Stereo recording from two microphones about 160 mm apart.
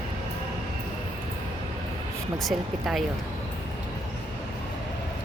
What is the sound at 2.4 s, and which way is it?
Speech, centre (ahead or behind).